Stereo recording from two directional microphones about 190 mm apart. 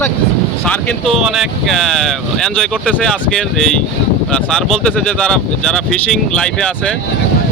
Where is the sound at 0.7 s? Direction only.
5° left (ahead or behind).